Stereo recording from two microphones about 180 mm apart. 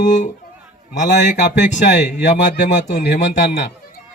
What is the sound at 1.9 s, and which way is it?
Speech, 75° left (ahead or behind).